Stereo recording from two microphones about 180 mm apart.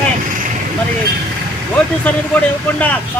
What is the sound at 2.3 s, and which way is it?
Speech, 10° left (ahead or behind).